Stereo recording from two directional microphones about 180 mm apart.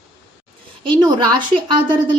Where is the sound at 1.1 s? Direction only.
25° right (ahead or behind).